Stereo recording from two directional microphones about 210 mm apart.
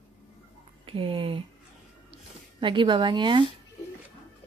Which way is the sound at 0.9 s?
25° right (ahead or behind).